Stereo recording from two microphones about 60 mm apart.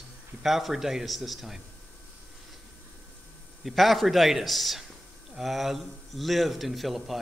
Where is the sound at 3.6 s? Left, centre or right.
Centre.